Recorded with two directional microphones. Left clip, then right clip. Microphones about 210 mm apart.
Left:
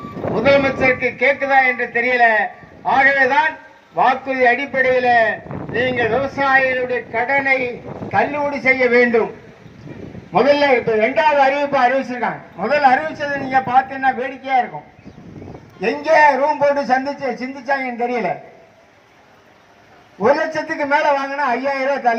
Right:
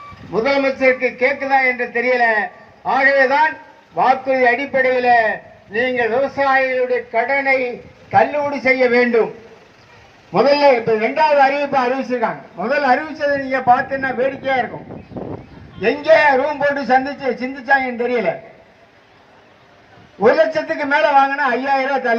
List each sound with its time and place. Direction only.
0.3 s a man's voice: 50° left (ahead or behind)
10.3 s a man's voice: 50° left (ahead or behind)
15.8 s a man's voice: 50° left (ahead or behind)
20.2 s a man's voice: 50° left (ahead or behind)